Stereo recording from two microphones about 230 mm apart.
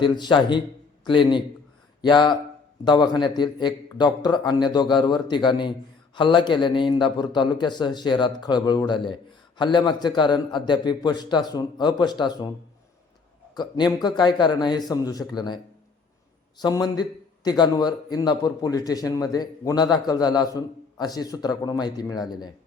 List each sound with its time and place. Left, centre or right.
0.0 s a man's voice: centre
13.5 s a man's voice: centre